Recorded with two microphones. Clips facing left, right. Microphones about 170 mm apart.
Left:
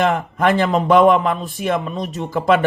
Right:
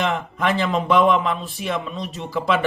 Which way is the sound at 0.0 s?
40° left (ahead or behind).